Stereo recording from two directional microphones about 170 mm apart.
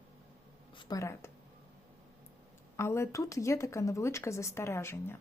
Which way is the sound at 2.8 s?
15° left (ahead or behind).